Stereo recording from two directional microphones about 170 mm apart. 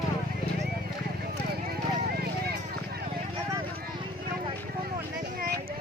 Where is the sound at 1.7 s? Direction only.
65° right (ahead or behind).